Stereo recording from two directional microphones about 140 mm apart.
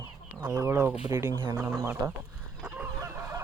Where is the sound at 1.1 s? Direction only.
25° right (ahead or behind).